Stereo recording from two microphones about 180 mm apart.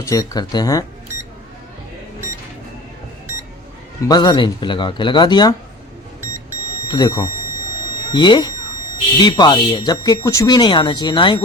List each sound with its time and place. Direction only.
0.0 s speech: 20° left (ahead or behind)
4.0 s speech: 25° left (ahead or behind)
6.9 s speech: 20° left (ahead or behind)